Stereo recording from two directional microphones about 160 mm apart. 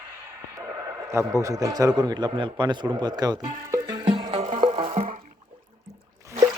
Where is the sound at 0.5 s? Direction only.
20° right (ahead or behind); by 4.6 s 45° right (ahead or behind).